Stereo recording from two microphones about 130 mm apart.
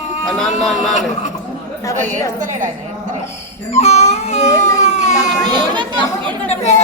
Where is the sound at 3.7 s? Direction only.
60° left (ahead or behind).